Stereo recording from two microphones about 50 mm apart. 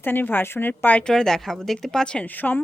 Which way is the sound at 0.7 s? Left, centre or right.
Left.